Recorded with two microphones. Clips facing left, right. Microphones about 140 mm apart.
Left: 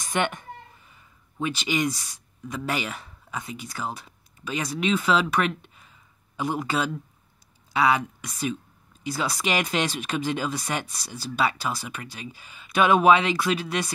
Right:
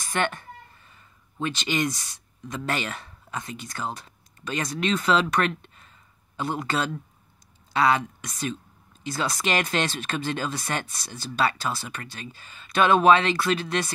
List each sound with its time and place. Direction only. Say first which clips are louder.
0.0 s speech: left 1 dB; 15° left (ahead or behind)